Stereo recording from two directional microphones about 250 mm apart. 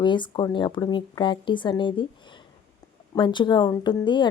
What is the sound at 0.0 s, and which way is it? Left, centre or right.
Speech, centre.